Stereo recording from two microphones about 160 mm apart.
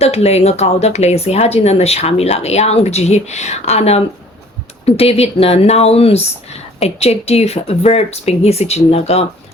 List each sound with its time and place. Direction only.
0.0 s speech: 40° left (ahead or behind)